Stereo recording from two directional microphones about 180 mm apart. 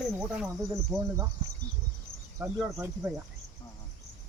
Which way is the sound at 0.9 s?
20° right (ahead or behind).